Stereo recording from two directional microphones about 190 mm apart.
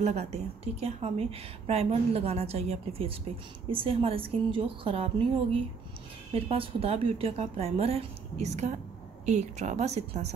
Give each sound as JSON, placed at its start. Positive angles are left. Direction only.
{"t": 0.0, "sound": "a woman's voice", "side_deg": -35}